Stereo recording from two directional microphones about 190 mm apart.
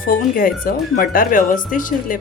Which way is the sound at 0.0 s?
50° left (ahead or behind).